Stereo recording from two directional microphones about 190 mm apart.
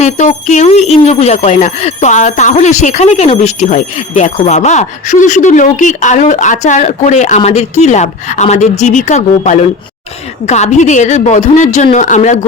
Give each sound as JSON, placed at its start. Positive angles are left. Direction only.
{"t": 0.0, "sound": "speech", "side_deg": 40}